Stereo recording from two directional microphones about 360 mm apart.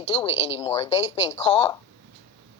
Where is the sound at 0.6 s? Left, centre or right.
Centre.